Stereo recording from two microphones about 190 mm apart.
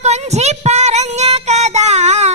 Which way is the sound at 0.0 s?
35° right (ahead or behind).